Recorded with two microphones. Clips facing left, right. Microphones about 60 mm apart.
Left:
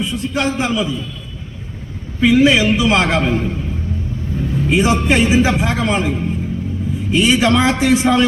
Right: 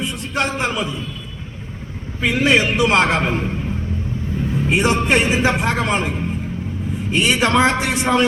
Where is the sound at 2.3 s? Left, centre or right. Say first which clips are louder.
Left 4 dB; right.